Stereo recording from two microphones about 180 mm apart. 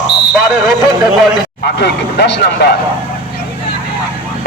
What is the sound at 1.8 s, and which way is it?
Speech, 65° left (ahead or behind).